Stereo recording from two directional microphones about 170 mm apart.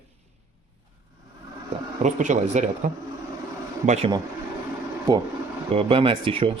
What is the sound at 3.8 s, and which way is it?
Speech, 45° right (ahead or behind).